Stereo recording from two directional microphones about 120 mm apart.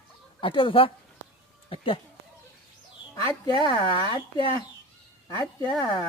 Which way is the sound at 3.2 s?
35° left (ahead or behind).